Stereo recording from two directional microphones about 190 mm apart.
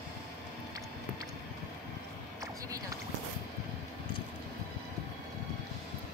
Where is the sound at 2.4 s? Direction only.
15° right (ahead or behind).